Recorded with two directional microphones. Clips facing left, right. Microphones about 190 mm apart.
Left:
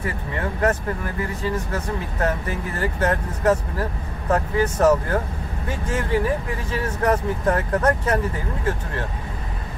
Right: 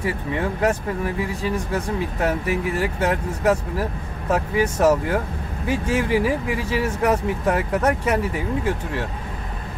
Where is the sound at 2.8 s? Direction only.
15° right (ahead or behind).